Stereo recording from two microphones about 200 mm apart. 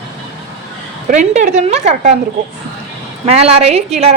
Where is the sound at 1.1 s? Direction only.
35° right (ahead or behind).